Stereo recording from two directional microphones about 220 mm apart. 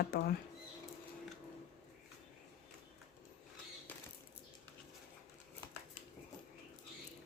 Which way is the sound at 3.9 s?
5° left (ahead or behind).